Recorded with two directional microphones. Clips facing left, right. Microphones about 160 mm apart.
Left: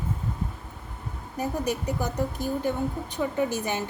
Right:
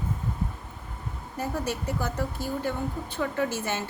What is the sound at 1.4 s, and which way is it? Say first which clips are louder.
A woman's voice: left 2 dB; 15° left (ahead or behind).